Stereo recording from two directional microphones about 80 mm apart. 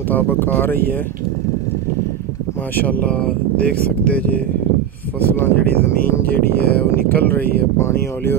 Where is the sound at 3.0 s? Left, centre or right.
Centre; by 8.3 s left.